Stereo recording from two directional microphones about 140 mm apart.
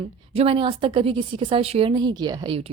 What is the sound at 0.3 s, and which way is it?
A woman's voice, 40° right (ahead or behind).